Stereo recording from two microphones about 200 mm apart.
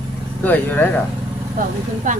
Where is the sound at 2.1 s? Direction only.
40° right (ahead or behind).